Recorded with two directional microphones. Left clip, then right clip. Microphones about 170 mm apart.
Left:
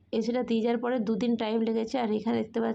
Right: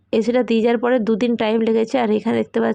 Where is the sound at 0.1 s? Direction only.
35° right (ahead or behind).